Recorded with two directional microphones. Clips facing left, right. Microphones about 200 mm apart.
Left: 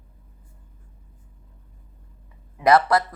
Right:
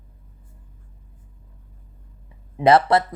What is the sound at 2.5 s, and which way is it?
Speech, 25° right (ahead or behind).